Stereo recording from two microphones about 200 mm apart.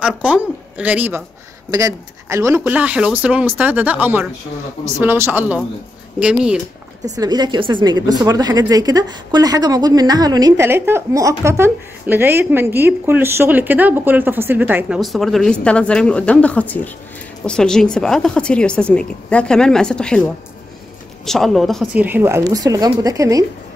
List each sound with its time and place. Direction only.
0.0 s a woman's voice: 5° right (ahead or behind)
7.2 s a woman's voice: 20° right (ahead or behind); by 20.2 s 5° left (ahead or behind)
21.3 s speech: centre (ahead or behind)
22.0 s a woman's voice: 10° right (ahead or behind)